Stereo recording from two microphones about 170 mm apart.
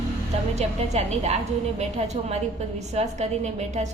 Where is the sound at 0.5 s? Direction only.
40° right (ahead or behind).